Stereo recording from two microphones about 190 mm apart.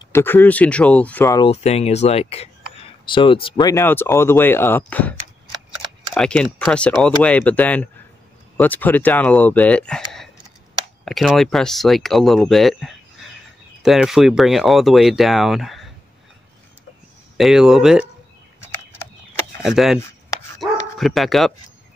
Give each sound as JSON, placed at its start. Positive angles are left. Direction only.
{"t": 0.1, "sound": "speech", "side_deg": 10}
{"t": 1.5, "sound": "speech", "side_deg": 35}
{"t": 6.1, "sound": "speech", "side_deg": 5}
{"t": 17.4, "sound": "speech", "side_deg": 0}
{"t": 19.6, "sound": "speech", "side_deg": 0}